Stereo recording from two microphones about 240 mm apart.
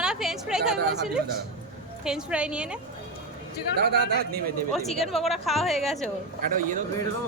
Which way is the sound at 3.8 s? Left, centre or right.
Right.